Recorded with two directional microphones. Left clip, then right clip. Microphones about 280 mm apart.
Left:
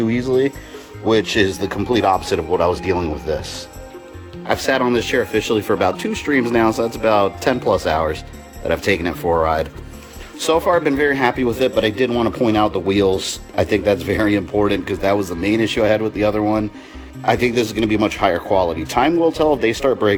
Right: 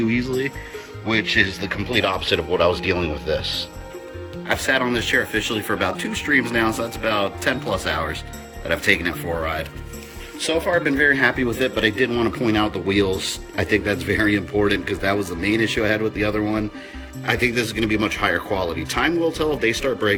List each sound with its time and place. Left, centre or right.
0.1 s speech: left
4.4 s speech: centre